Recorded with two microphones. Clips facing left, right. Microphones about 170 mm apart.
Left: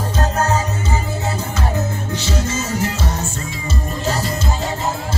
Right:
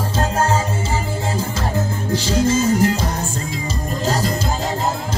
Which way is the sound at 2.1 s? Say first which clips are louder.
Right 8 dB; 30° right (ahead or behind).